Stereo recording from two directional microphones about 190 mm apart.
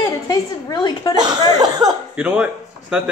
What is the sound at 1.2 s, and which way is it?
Speech, 20° right (ahead or behind).